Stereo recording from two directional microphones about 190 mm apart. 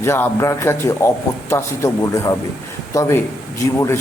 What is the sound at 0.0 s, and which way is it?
A man's voice, 15° left (ahead or behind).